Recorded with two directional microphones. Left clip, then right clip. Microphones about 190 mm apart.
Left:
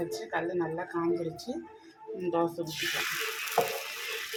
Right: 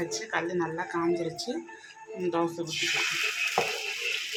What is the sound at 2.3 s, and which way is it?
Speech, 15° left (ahead or behind).